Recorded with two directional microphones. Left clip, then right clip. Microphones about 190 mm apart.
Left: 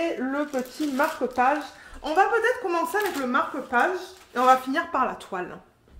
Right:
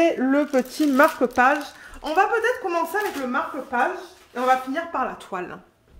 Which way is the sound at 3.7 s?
30° left (ahead or behind).